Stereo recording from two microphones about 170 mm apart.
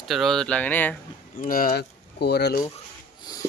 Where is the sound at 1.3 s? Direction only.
55° left (ahead or behind).